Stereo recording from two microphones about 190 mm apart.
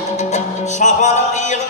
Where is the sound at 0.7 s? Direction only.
40° left (ahead or behind).